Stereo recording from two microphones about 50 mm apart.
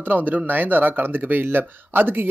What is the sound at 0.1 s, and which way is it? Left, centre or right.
Speech, right.